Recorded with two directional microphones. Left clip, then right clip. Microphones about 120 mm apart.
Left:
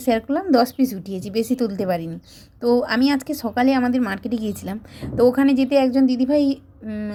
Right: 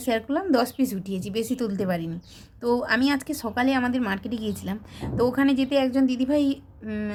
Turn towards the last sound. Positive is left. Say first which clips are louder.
# left 4 dB
turn(degrees=20)  # may be behind; listen again after turning